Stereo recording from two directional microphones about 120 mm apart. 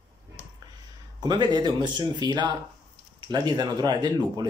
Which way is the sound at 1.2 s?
35° right (ahead or behind).